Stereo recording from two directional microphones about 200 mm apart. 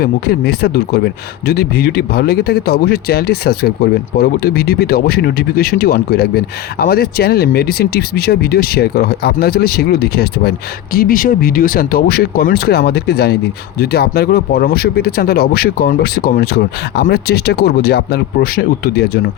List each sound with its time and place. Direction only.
0.0 s speech: 50° left (ahead or behind)